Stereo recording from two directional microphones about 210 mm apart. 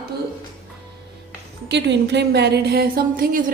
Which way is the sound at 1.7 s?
55° right (ahead or behind).